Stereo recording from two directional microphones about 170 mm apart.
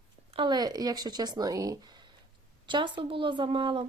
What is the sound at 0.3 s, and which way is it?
Speech, 25° right (ahead or behind).